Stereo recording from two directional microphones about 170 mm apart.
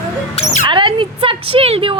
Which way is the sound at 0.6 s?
30° right (ahead or behind).